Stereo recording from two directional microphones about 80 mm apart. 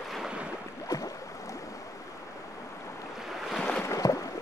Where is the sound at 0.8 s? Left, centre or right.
Left.